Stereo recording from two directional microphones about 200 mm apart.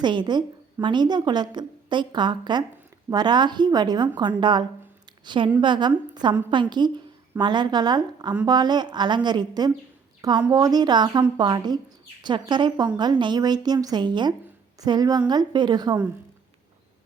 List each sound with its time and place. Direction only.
0.0 s a woman's voice: 25° right (ahead or behind)